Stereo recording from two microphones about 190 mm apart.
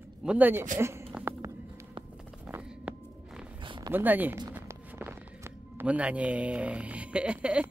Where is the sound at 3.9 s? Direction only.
10° right (ahead or behind).